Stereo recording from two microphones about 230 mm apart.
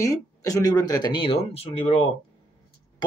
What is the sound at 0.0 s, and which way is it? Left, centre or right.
Speech, centre.